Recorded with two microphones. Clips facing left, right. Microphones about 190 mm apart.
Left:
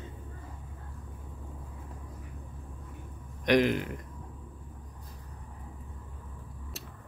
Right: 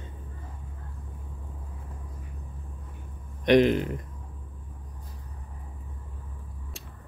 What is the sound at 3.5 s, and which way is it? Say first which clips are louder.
Speech: right 5 dB; 25° right (ahead or behind).